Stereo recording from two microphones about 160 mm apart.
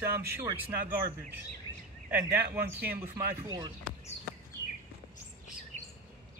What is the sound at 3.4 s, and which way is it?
Speech, 25° right (ahead or behind).